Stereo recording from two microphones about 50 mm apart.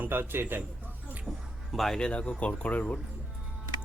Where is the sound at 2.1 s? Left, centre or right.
Left.